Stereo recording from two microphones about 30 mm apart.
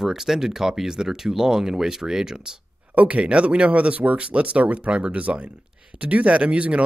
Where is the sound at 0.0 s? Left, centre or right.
Centre.